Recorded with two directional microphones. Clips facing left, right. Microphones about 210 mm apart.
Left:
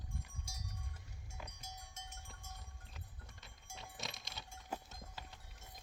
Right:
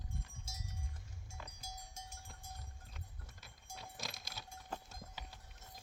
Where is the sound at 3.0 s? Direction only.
Centre (ahead or behind).